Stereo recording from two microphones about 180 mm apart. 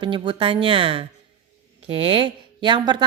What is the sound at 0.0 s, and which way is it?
A woman's voice, 25° right (ahead or behind).